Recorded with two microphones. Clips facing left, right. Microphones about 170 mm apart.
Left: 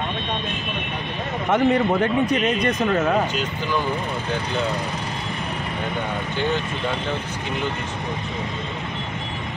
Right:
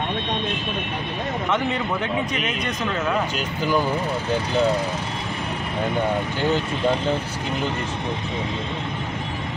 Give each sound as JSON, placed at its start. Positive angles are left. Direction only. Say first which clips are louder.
{"t": 1.5, "sound": "a man's voice", "louder": "left 8 dB", "side_deg": 45}